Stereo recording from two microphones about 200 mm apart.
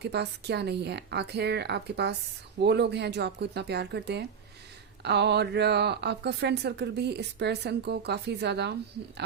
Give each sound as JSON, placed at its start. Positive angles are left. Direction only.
{"t": 0.0, "sound": "a woman's voice", "side_deg": -55}